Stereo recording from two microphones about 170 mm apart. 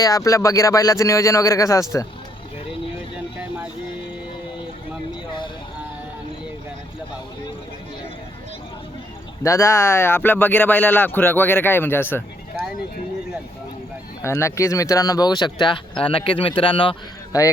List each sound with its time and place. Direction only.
0.0 s speech: 20° left (ahead or behind)
9.4 s speech: 20° left (ahead or behind)
14.2 s speech: 15° left (ahead or behind)